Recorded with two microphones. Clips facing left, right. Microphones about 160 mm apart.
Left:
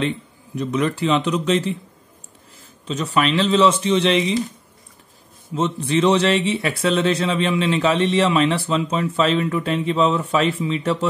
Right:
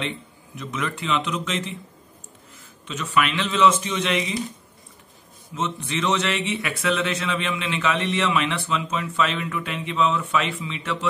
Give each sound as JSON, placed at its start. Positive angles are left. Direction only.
{"t": 0.6, "sound": "speech", "side_deg": 35}
{"t": 2.9, "sound": "speech", "side_deg": 35}
{"t": 5.5, "sound": "speech", "side_deg": 30}